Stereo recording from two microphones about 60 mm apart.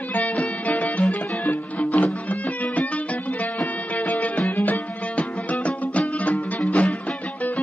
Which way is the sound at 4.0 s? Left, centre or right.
Left.